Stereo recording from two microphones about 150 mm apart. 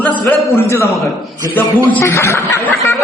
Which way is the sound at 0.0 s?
15° left (ahead or behind).